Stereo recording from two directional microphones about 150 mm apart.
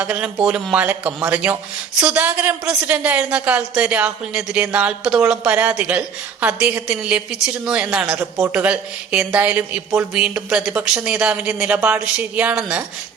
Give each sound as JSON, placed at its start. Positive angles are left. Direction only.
{"t": 0.0, "sound": "a woman's voice", "side_deg": -5}